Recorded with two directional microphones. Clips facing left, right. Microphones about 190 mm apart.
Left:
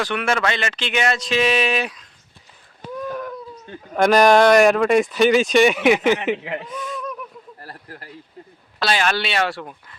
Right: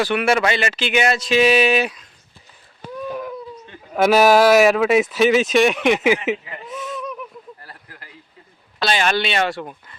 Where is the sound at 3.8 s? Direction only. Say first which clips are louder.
Even; 5° right (ahead or behind).